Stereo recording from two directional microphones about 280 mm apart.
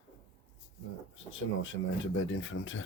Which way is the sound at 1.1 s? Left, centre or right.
Left.